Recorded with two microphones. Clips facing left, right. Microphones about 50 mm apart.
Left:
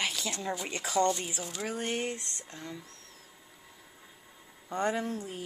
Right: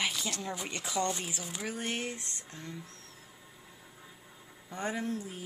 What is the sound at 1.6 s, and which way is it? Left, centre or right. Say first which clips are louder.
Speech: left 3 dB; left.